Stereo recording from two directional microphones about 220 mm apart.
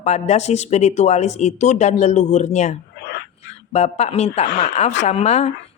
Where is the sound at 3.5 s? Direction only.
30° left (ahead or behind).